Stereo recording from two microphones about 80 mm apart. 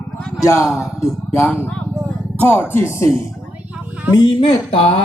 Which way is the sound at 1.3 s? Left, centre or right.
Left.